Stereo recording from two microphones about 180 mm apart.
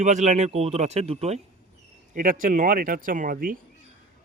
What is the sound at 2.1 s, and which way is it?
Speech, 45° right (ahead or behind).